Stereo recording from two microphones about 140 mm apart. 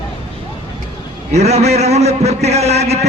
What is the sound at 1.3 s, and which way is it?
A man's voice, 50° right (ahead or behind).